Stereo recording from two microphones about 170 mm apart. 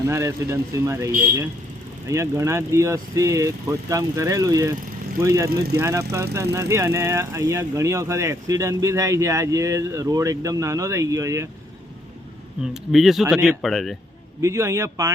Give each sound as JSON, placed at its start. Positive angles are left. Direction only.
{"t": 0.0, "sound": "speech", "side_deg": -20}
{"t": 5.5, "sound": "speech", "side_deg": -65}
{"t": 5.8, "sound": "speech", "side_deg": -20}
{"t": 12.7, "sound": "speech", "side_deg": 0}
{"t": 14.4, "sound": "speech", "side_deg": -15}